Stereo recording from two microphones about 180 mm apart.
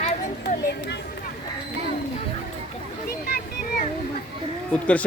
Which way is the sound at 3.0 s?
55° left (ahead or behind).